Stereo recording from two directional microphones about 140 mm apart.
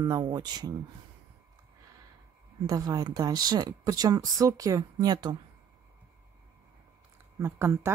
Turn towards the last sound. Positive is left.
turn(degrees=-20)  # may be behind; listen again after turning